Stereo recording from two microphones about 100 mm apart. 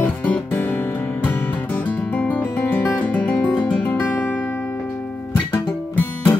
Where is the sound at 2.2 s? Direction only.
15° left (ahead or behind).